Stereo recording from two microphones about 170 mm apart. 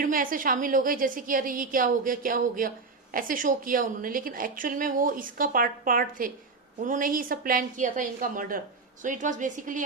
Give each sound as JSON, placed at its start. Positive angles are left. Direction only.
{"t": 0.0, "sound": "a woman's voice", "side_deg": -55}